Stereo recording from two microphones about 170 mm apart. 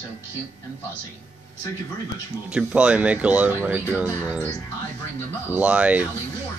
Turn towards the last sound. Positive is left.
turn(degrees=-5)  # may be behind; listen again after turning